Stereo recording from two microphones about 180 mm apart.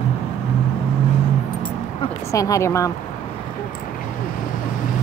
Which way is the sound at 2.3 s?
20° left (ahead or behind).